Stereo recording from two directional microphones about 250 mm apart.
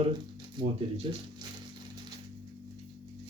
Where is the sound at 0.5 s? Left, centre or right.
Centre.